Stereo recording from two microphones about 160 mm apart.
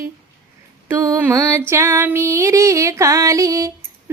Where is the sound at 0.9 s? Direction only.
15° right (ahead or behind).